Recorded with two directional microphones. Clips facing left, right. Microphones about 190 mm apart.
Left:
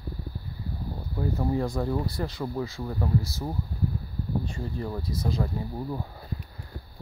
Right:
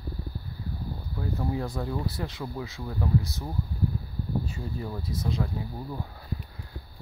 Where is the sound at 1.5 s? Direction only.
Centre (ahead or behind).